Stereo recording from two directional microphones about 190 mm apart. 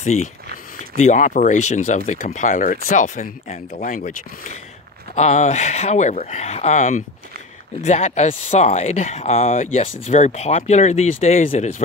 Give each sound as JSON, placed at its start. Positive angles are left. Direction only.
{"t": 0.0, "sound": "speech", "side_deg": 35}